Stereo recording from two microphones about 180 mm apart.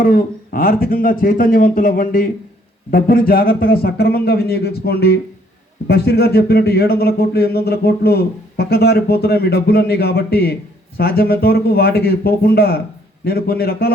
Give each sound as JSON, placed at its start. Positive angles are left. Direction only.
{"t": 0.0, "sound": "speech", "side_deg": 55}